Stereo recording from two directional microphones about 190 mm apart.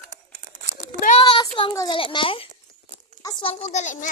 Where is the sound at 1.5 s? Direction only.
20° left (ahead or behind).